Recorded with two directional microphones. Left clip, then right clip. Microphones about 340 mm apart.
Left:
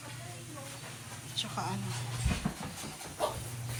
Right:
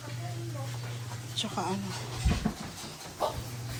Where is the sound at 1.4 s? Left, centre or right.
Centre.